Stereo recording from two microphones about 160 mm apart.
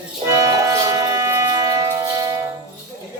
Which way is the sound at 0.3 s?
20° right (ahead or behind).